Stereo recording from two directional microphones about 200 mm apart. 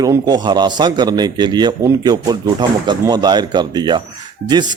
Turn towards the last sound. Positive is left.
turn(degrees=-20)  # may be behind; listen again after turning